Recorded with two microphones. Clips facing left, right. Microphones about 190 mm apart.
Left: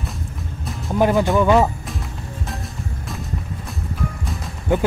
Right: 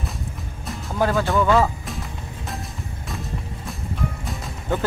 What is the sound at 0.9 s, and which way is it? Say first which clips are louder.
Speech: left 4 dB; 20° left (ahead or behind).